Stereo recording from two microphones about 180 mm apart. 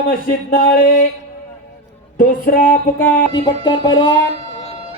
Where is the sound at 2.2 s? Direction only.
50° left (ahead or behind).